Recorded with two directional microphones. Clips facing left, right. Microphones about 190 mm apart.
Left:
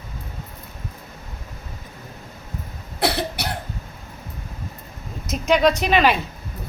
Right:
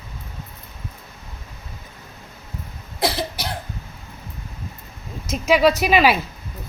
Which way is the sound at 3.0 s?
65° left (ahead or behind).